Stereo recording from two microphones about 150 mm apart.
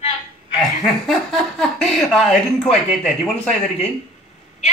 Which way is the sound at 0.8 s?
Centre (ahead or behind).